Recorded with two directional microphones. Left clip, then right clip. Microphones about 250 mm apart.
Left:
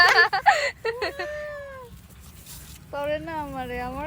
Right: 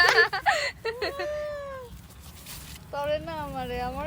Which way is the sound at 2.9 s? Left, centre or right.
Left.